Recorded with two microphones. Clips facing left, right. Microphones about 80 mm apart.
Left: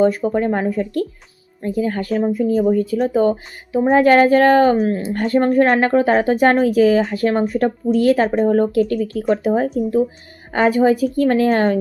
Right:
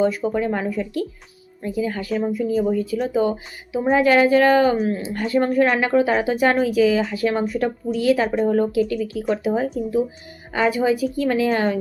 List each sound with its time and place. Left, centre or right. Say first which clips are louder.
0.0 s a woman's voice: left 4 dB; left